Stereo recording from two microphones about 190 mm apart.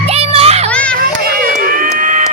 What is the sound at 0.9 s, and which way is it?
Run, 50° right (ahead or behind).